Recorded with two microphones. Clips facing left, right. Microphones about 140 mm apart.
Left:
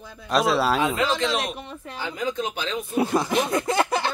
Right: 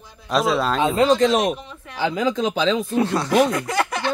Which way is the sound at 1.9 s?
90° right.